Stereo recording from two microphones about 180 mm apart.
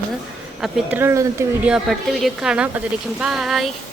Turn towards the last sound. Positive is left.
turn(degrees=0)  # may be behind; listen again after turning